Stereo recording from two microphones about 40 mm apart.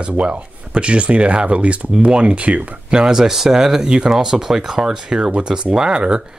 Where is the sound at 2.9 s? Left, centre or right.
Centre.